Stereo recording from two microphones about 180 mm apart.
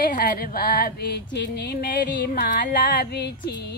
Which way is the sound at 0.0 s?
50° left (ahead or behind).